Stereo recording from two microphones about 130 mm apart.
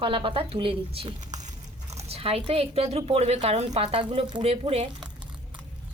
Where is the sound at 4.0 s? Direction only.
40° right (ahead or behind).